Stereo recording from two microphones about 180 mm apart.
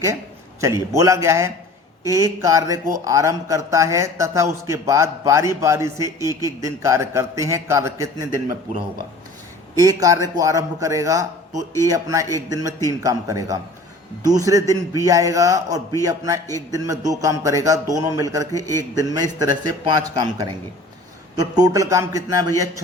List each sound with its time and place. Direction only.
0.6 s a man's voice: 15° right (ahead or behind)
10.0 s a man's voice: 20° right (ahead or behind)